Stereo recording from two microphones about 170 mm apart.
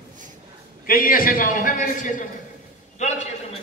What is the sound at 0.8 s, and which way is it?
A man's voice, 55° left (ahead or behind).